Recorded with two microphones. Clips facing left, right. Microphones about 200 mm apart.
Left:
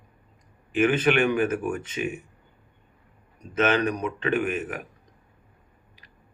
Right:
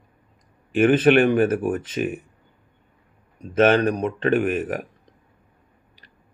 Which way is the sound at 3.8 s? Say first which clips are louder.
Right 5 dB; 35° right (ahead or behind).